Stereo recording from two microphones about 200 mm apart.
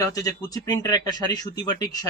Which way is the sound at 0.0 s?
15° left (ahead or behind).